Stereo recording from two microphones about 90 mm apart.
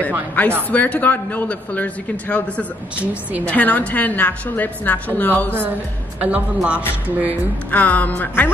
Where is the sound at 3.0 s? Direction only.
15° right (ahead or behind).